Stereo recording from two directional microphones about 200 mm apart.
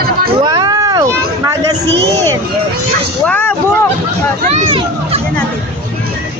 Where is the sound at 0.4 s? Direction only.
20° right (ahead or behind).